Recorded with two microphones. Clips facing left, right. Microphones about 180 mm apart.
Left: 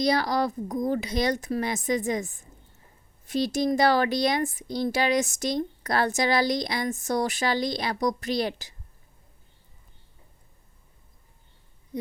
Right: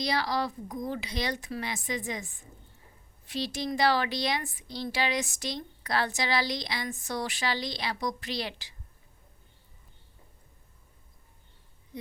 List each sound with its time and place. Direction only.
0.0 s a woman's voice: 45° left (ahead or behind)